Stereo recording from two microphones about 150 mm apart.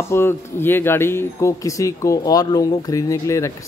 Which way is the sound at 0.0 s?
15° left (ahead or behind).